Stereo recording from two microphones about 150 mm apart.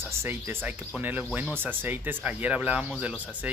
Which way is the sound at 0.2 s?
15° right (ahead or behind).